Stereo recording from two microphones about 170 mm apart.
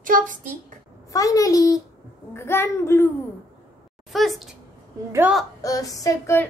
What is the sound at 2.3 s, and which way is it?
Speech, 15° left (ahead or behind).